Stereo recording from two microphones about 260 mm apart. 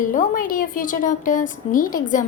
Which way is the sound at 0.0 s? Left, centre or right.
Left.